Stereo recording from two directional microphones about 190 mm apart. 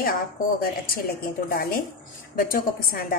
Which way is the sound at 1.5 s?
50° left (ahead or behind).